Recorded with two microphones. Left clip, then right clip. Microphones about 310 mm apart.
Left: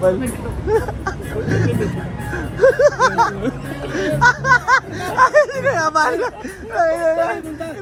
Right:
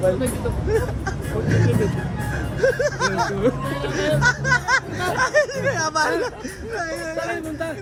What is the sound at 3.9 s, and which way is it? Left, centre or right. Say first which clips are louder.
Speech: left 2 dB; centre.